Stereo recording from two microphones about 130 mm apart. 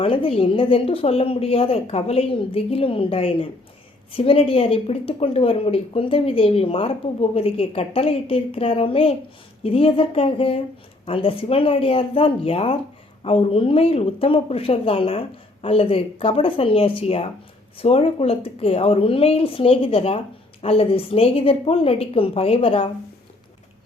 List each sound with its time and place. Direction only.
0.0 s speech: 45° left (ahead or behind)